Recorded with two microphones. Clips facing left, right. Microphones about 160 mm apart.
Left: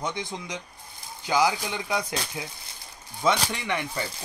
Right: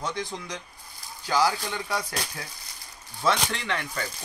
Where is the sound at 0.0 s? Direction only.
20° left (ahead or behind).